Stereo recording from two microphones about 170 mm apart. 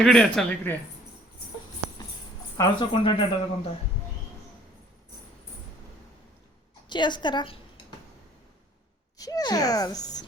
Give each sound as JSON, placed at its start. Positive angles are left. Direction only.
{"t": 0.0, "sound": "speech", "side_deg": 0}
{"t": 2.6, "sound": "speech", "side_deg": 30}
{"t": 6.8, "sound": "a woman's voice", "side_deg": 25}
{"t": 9.1, "sound": "a child's voice", "side_deg": 20}